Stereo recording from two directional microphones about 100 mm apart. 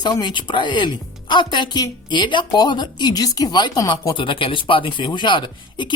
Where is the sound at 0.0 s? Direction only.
45° left (ahead or behind).